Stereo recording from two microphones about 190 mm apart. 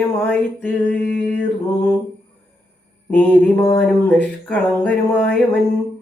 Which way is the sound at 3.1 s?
10° left (ahead or behind).